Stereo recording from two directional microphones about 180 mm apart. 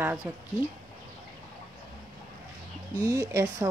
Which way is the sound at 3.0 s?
20° right (ahead or behind).